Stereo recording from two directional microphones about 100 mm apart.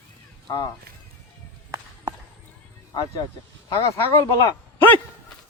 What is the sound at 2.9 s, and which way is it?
Speech, 40° left (ahead or behind).